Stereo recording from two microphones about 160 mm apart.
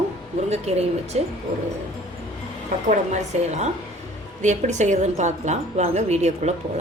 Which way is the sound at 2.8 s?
45° right (ahead or behind).